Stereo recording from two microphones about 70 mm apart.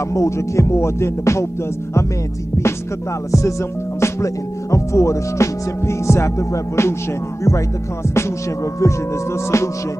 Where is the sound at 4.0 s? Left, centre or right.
Left.